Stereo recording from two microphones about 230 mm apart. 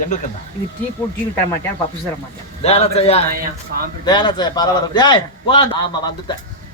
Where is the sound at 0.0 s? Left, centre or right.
Left.